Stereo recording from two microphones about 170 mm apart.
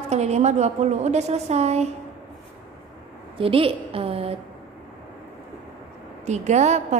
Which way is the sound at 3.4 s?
30° right (ahead or behind).